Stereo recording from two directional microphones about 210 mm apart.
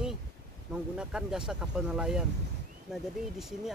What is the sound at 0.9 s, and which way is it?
Speech, 5° right (ahead or behind).